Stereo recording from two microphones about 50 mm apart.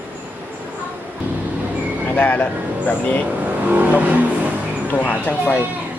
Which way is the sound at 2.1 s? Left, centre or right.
Left.